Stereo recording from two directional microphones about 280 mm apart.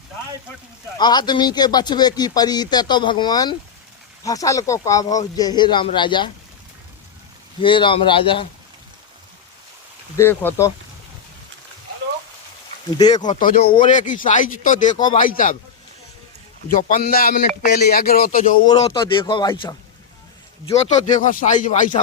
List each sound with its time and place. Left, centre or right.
0.9 s speech: centre
7.6 s speech: centre
10.2 s speech: centre
12.9 s speech: centre
13.4 s speech: left
14.9 s speech: centre
15.2 s speech: left
16.7 s speech: left
18.6 s speech: centre